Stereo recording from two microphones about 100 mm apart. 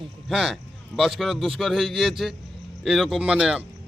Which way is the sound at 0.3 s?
5° right (ahead or behind).